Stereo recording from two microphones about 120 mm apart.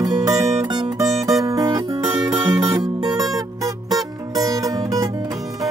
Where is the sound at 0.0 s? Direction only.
30° right (ahead or behind).